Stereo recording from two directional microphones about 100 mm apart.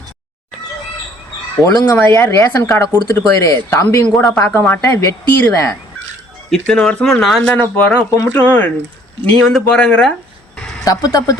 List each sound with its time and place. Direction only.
1.8 s a woman's voice: 20° left (ahead or behind)
4.0 s speech: 40° left (ahead or behind)
4.4 s a woman's voice: 25° left (ahead or behind)
6.5 s speech: 10° left (ahead or behind)
7.5 s speech: 15° left (ahead or behind)
8.1 s speech: 35° left (ahead or behind)
8.4 s a woman's voice: 20° left (ahead or behind)
9.4 s speech: 5° left (ahead or behind)
10.8 s speech: 35° left (ahead or behind)